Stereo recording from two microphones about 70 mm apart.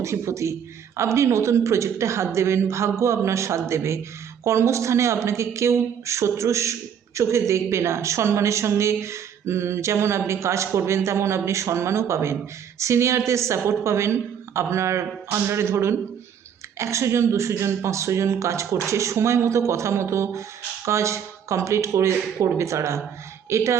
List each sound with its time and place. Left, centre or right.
0.0 s a woman's voice: right